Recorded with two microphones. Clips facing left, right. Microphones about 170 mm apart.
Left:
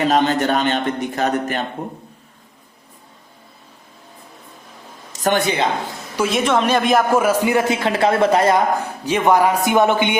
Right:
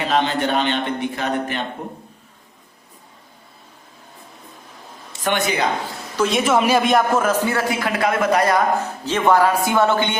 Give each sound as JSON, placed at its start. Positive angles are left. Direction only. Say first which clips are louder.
{"t": 0.1, "sound": "a man's voice", "louder": "left 3 dB", "side_deg": 45}
{"t": 5.2, "sound": "speech", "louder": "left 3 dB", "side_deg": 35}
{"t": 6.1, "sound": "a man's voice", "louder": "even", "side_deg": 0}
{"t": 7.1, "sound": "a man's voice", "louder": "left 3 dB", "side_deg": 10}
{"t": 8.8, "sound": "a man's voice", "louder": "left 1 dB", "side_deg": 15}